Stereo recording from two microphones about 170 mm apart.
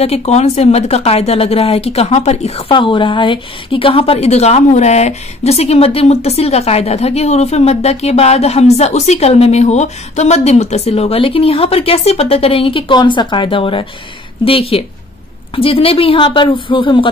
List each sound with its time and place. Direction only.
0.0 s a woman's voice: 40° left (ahead or behind)